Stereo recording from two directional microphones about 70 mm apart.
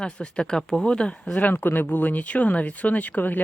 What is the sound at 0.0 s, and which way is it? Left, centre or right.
Speech, centre.